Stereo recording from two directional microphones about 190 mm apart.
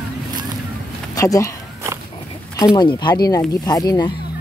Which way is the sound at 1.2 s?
15° left (ahead or behind).